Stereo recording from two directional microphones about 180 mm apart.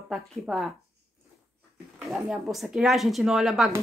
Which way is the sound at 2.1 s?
Centre (ahead or behind).